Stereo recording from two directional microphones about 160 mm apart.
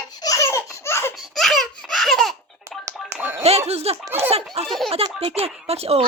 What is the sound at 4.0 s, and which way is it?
Speech, 15° right (ahead or behind).